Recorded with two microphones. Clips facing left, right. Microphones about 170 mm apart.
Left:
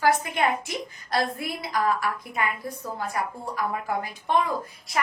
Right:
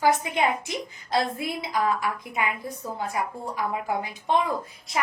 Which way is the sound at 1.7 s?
15° right (ahead or behind).